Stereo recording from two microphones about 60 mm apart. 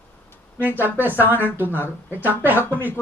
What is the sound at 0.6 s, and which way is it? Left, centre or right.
Speech, right.